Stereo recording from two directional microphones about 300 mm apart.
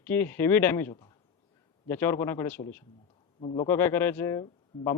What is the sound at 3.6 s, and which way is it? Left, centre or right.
Speech, centre.